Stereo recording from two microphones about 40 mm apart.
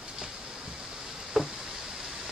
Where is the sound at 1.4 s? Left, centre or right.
Centre.